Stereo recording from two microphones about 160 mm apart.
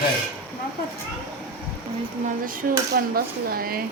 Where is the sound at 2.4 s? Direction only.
65° right (ahead or behind).